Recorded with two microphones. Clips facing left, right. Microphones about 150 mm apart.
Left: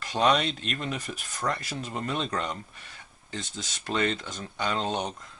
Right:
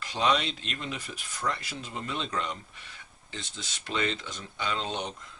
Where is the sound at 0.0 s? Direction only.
45° left (ahead or behind).